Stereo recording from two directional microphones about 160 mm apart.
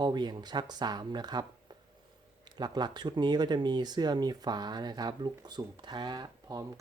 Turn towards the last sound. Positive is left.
turn(degrees=-25)  # may be behind; listen again after turning